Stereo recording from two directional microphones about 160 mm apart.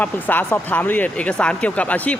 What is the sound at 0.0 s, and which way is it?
Speech, 10° left (ahead or behind).